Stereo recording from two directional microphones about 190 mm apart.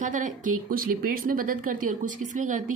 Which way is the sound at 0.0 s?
40° right (ahead or behind).